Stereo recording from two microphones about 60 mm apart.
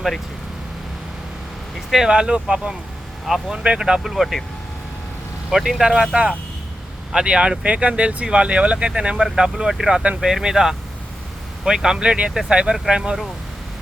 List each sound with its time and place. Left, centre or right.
2.0 s speech: centre
4.0 s speech: centre
5.5 s speech: centre